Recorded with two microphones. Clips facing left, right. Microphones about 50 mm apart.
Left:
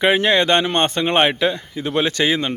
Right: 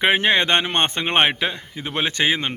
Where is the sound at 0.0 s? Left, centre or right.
Right.